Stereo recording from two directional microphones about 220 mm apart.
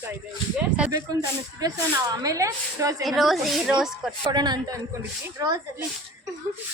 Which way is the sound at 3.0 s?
Centre (ahead or behind).